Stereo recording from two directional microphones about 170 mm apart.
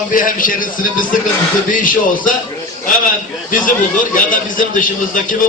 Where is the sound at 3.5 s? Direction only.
50° left (ahead or behind).